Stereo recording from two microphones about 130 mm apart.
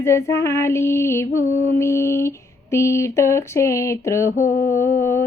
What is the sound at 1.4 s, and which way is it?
Female singing, 70° left (ahead or behind).